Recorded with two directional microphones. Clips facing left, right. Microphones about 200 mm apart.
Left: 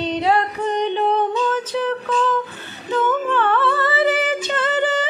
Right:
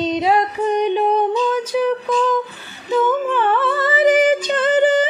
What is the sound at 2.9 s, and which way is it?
Humming, 10° right (ahead or behind).